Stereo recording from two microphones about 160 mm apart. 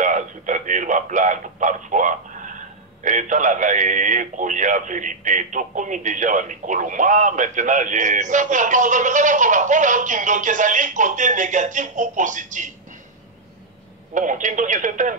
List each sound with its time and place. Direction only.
0.0 s a sound: 50° right (ahead or behind)
3.0 s speech: 50° right (ahead or behind)
14.1 s speech: 50° right (ahead or behind)